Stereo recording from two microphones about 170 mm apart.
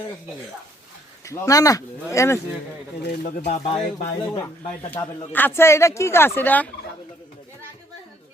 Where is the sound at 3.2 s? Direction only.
45° left (ahead or behind).